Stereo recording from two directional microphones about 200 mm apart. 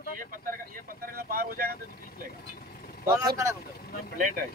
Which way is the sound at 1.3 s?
45° right (ahead or behind).